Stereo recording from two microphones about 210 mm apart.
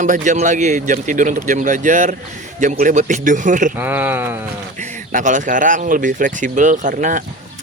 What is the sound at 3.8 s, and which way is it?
Speech, 10° right (ahead or behind).